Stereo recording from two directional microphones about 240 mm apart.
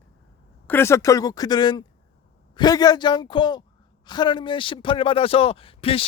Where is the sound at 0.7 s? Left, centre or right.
Centre.